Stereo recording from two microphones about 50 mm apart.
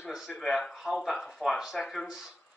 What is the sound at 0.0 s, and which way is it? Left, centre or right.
Speech, centre.